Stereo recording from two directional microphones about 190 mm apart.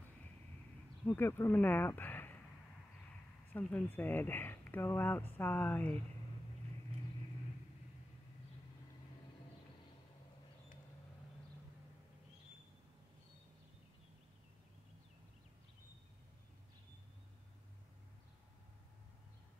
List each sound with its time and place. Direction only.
1.0 s speech: 10° left (ahead or behind)
3.5 s speech: 10° left (ahead or behind)